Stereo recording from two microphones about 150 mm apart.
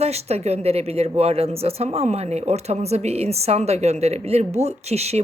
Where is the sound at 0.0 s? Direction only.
45° right (ahead or behind).